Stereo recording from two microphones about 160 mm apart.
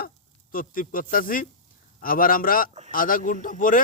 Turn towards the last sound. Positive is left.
turn(degrees=60)  # may be behind; listen again after turning